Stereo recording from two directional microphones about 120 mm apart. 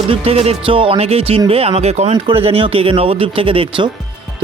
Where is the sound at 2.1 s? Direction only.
45° right (ahead or behind).